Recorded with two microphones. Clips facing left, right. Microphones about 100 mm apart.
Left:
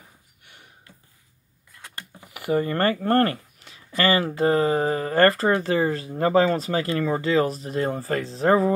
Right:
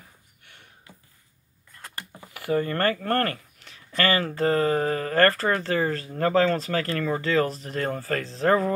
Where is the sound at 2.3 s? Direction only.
10° left (ahead or behind).